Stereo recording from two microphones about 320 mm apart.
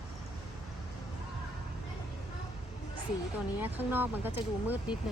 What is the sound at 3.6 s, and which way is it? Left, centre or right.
Speech, centre.